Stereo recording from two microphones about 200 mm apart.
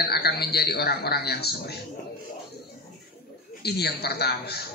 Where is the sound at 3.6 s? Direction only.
55° left (ahead or behind).